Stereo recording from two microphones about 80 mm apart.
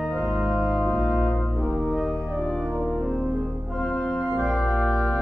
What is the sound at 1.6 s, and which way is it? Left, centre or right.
Music, centre.